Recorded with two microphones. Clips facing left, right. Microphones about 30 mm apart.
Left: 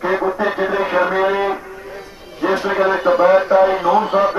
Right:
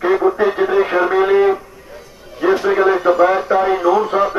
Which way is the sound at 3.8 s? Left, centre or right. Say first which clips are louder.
Right 1 dB; left.